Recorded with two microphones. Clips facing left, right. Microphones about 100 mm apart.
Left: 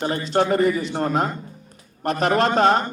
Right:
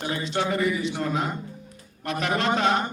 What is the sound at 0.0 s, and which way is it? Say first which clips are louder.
A man's voice: left 6 dB; 45° left (ahead or behind).